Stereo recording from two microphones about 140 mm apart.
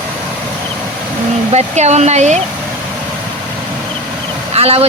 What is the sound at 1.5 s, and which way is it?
Speech, 50° right (ahead or behind).